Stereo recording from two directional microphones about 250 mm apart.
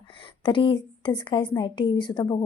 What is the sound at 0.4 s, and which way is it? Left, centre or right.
A woman's voice, centre.